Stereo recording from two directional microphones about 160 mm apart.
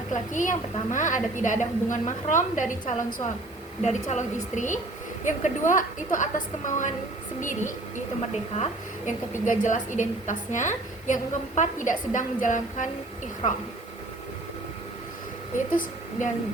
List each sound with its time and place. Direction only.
0.1 s a woman's voice: 50° left (ahead or behind)
15.5 s speech: 55° left (ahead or behind)